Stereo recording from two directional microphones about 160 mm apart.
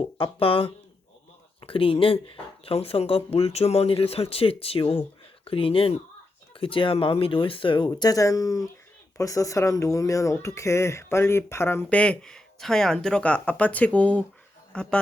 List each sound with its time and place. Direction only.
0.2 s a man's voice: 35° left (ahead or behind); by 15.0 s 5° left (ahead or behind)